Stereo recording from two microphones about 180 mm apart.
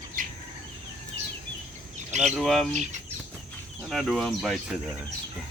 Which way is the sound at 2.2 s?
Centre (ahead or behind).